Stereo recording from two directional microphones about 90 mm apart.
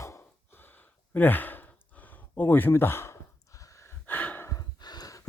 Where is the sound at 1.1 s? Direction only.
20° left (ahead or behind); by 3.9 s 35° left (ahead or behind).